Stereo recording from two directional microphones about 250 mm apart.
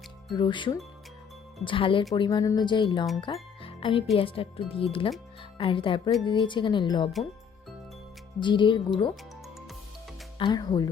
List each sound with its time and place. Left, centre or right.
0.3 s speech: centre
8.4 s speech: centre
10.3 s speech: centre